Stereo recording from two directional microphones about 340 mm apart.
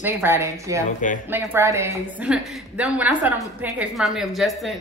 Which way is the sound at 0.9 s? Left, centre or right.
Left.